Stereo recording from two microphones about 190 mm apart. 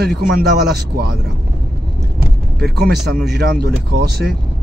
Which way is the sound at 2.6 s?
60° right (ahead or behind).